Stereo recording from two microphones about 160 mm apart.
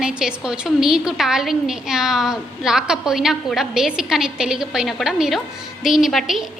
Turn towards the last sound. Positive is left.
turn(degrees=0)  # may be behind; listen again after turning